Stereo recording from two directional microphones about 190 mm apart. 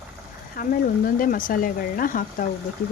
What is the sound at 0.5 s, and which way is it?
Speech, 50° left (ahead or behind).